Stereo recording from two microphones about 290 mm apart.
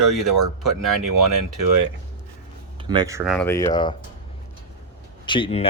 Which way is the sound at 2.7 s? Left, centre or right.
Centre.